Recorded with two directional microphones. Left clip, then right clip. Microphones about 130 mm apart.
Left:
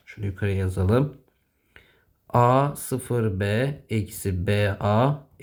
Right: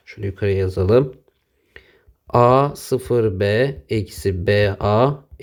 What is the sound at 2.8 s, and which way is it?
Speech, 50° right (ahead or behind).